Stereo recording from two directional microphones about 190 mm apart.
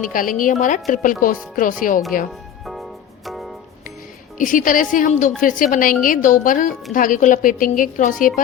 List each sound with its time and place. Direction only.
0.0 s a woman's voice: 45° left (ahead or behind)
3.2 s music: centre (ahead or behind)
4.4 s a woman's voice: 45° left (ahead or behind)